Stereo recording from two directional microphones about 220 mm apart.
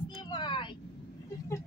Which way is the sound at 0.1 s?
20° left (ahead or behind).